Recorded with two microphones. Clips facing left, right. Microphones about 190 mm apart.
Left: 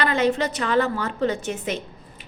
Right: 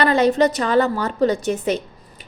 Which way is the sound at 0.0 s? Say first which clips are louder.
Right 6 dB; 35° right (ahead or behind).